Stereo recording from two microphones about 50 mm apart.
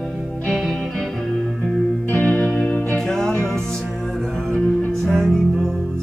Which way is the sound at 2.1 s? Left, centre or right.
Left.